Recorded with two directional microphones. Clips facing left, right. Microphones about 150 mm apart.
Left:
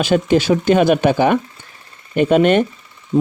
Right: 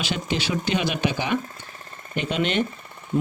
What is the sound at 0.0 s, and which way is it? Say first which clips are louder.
Speech: left 12 dB; 50° left (ahead or behind).